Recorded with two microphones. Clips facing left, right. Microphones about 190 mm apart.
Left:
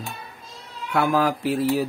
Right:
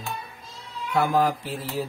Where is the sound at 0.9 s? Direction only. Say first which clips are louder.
Left 1 dB; 65° left (ahead or behind).